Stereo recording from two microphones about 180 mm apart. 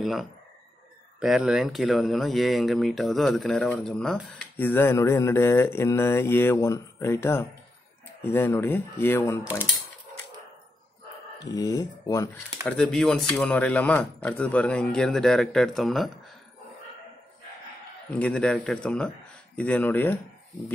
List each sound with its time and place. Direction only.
0.0 s speech: centre (ahead or behind)
11.5 s speech: 20° left (ahead or behind)
12.6 s speech: 5° left (ahead or behind)
18.1 s speech: 5° left (ahead or behind)